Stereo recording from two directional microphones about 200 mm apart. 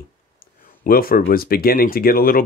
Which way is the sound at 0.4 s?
45° left (ahead or behind).